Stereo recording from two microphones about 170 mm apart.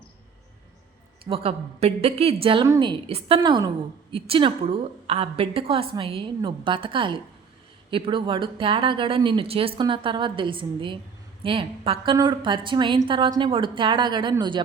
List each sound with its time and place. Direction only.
1.2 s a woman's voice: 35° right (ahead or behind)
3.1 s a woman's voice: 35° right (ahead or behind)